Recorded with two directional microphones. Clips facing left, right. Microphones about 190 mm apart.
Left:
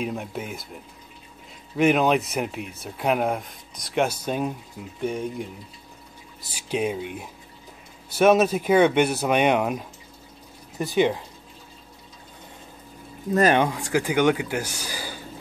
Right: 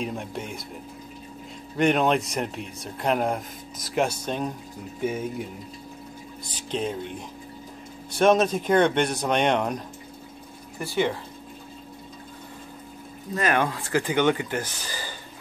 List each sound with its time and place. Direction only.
0.0 s speech: 5° left (ahead or behind)
1.8 s speech: 5° left (ahead or behind)
5.0 s speech: 5° right (ahead or behind)
6.5 s speech: 10° left (ahead or behind)
10.8 s speech: 15° left (ahead or behind)
13.6 s speech: 15° left (ahead or behind)